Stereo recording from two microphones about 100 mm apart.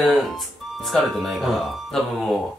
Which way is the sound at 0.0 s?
Centre (ahead or behind).